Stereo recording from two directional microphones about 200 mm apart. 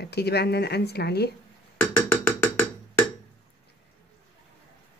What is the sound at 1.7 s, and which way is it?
Percussion, 10° left (ahead or behind).